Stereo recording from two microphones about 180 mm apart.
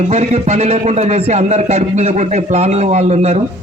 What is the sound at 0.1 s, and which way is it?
Speech, 40° right (ahead or behind).